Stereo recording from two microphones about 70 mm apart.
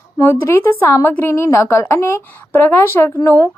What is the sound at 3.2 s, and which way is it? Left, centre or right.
Speech, left.